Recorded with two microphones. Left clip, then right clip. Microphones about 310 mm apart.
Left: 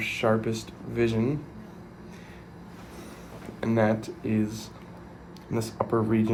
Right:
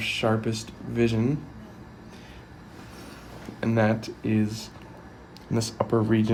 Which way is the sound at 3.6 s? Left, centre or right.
Right.